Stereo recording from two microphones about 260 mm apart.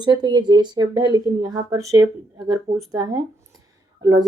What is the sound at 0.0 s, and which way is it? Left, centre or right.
Speech, centre.